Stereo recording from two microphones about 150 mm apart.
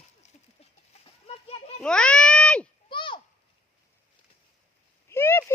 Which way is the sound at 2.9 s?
35° left (ahead or behind).